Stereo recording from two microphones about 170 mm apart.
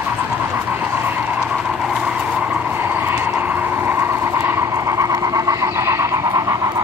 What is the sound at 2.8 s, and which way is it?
Vehicle, 10° right (ahead or behind).